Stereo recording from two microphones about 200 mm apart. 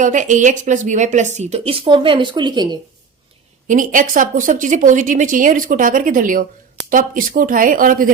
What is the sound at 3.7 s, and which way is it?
A woman's voice, 40° right (ahead or behind).